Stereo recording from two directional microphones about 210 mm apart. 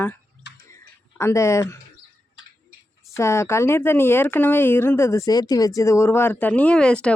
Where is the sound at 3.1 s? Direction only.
15° left (ahead or behind).